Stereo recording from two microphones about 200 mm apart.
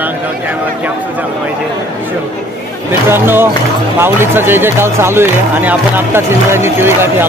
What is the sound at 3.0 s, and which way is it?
Speech, 10° right (ahead or behind).